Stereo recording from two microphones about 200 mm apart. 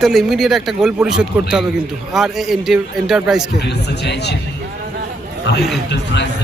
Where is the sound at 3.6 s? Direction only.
55° left (ahead or behind).